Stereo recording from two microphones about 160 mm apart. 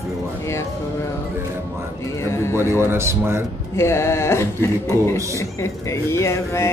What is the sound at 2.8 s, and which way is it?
Speech, 15° right (ahead or behind).